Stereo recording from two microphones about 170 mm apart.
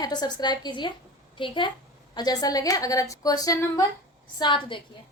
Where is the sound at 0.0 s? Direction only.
25° left (ahead or behind).